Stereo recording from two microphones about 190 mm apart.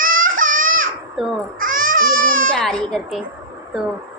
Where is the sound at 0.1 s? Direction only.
90° right.